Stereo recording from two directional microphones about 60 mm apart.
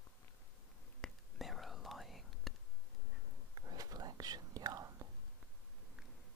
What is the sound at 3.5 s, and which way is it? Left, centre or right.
Whispering, right.